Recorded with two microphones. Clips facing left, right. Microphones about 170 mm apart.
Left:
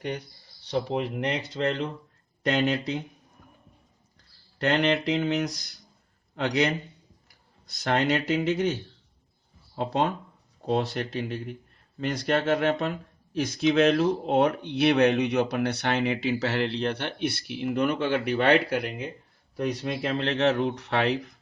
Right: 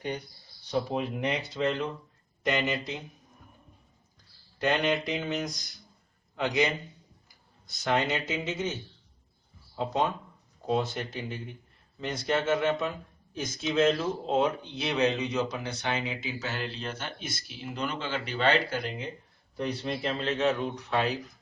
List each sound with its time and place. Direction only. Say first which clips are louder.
0.6 s speech: left 2 dB; 65° left (ahead or behind)
4.5 s speech: left 3 dB; 65° left (ahead or behind)